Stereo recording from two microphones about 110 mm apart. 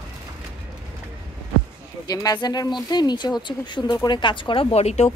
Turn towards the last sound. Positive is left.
turn(degrees=75)  # may be behind; listen again after turning